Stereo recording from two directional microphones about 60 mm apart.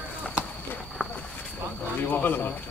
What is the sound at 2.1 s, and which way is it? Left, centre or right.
Speech, left.